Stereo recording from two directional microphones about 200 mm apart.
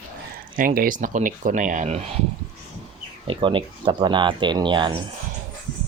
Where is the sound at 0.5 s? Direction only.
45° right (ahead or behind).